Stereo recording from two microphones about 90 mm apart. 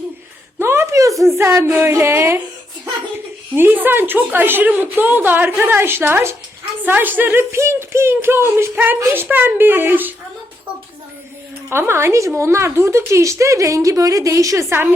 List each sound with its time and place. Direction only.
0.6 s a sound: 30° right (ahead or behind)
1.4 s a woman's voice: 30° right (ahead or behind)
3.5 s a woman's voice: 20° right (ahead or behind)
11.7 s a woman's voice: 30° right (ahead or behind)